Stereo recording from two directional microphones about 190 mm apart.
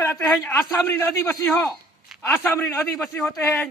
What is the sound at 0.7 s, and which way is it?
Speech, 10° left (ahead or behind).